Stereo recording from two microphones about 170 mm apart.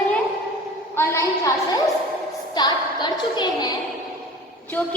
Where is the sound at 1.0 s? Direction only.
15° left (ahead or behind).